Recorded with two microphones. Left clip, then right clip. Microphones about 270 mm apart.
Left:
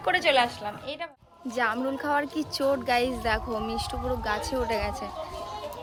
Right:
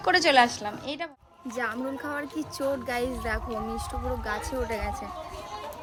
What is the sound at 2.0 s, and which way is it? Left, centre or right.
Speech, centre.